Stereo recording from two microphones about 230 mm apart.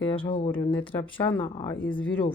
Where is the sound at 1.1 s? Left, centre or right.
Left.